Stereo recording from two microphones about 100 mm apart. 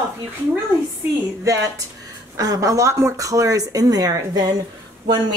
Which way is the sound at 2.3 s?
35° right (ahead or behind).